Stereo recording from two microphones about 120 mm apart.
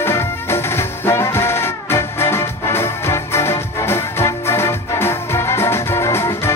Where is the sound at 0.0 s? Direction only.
20° left (ahead or behind).